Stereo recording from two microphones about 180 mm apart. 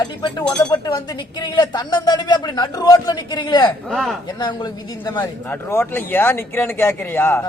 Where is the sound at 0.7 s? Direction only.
20° left (ahead or behind).